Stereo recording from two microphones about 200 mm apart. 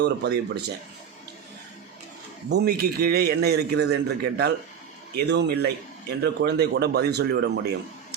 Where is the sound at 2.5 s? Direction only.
50° right (ahead or behind).